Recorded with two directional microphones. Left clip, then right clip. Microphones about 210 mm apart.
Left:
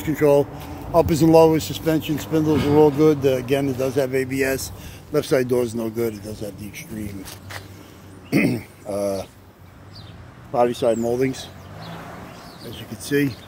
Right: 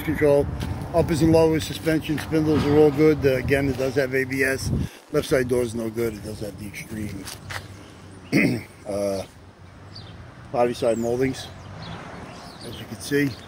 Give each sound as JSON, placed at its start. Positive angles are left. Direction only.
{"t": 0.0, "sound": "speech", "side_deg": 20}
{"t": 8.3, "sound": "a sound", "side_deg": 10}
{"t": 10.5, "sound": "speech", "side_deg": 15}
{"t": 13.1, "sound": "speech", "side_deg": 20}